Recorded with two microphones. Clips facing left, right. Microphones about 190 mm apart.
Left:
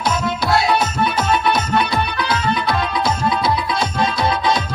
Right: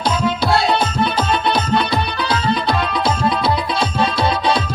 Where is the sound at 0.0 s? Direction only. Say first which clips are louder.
Right 2 dB; 30° right (ahead or behind).